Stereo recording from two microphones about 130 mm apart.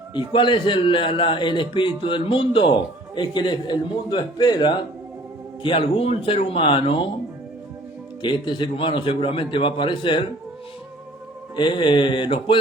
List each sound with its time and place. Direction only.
0.3 s a man's voice: 40° left (ahead or behind)
5.6 s speech: 45° left (ahead or behind)
8.2 s a man's voice: 35° left (ahead or behind)
11.5 s a man's voice: 35° left (ahead or behind)